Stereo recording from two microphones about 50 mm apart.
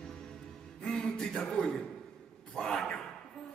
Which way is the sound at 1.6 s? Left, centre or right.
Centre.